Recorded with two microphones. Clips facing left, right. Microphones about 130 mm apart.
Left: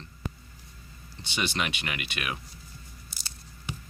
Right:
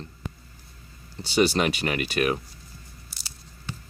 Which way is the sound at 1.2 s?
40° right (ahead or behind).